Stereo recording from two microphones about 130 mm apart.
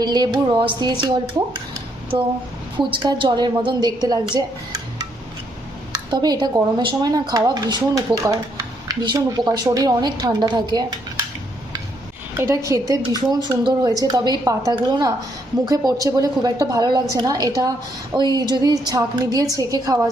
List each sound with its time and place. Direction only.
0.0 s speech: 35° right (ahead or behind)
2.1 s speech: 35° right (ahead or behind)
12.4 s a woman's voice: 20° right (ahead or behind)